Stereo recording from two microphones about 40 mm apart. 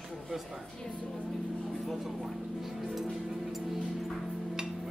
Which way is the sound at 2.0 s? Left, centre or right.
Centre.